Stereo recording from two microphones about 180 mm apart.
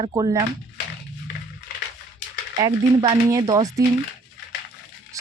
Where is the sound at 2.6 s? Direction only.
25° right (ahead or behind).